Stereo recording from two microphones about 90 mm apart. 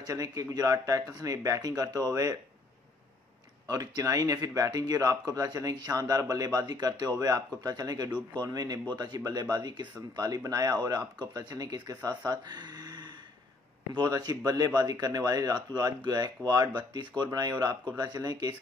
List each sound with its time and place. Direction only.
0.0 s speech: 45° right (ahead or behind)
3.6 s speech: 45° right (ahead or behind)